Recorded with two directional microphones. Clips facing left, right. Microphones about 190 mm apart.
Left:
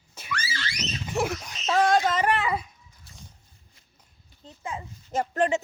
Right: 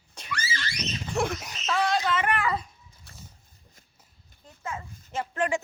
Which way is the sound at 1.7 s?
45° left (ahead or behind).